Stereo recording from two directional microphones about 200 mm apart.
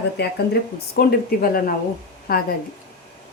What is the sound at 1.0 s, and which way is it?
Speech, 50° left (ahead or behind).